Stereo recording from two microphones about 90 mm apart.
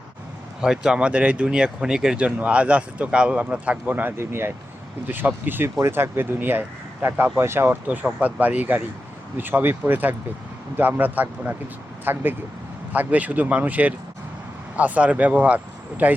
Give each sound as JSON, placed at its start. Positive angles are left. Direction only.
{"t": 0.6, "sound": "speech", "side_deg": -10}
{"t": 7.9, "sound": "speech", "side_deg": -15}